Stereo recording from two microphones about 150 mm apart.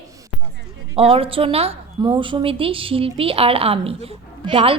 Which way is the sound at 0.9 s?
40° right (ahead or behind).